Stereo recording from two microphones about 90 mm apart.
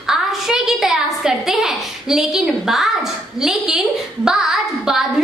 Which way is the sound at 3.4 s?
5° right (ahead or behind).